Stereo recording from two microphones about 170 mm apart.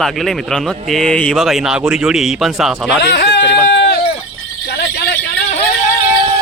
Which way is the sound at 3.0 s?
85° left.